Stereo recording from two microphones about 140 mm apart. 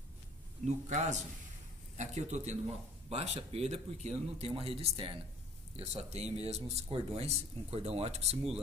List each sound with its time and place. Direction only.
0.7 s a man's voice: 60° right (ahead or behind)